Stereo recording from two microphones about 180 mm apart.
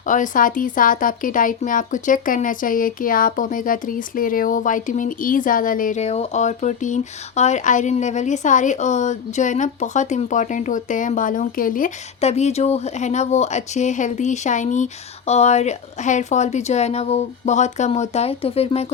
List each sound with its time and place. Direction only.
0.0 s speech: 45° left (ahead or behind)